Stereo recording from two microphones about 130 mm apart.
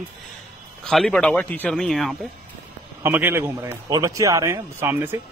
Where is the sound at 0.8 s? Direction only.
5° left (ahead or behind).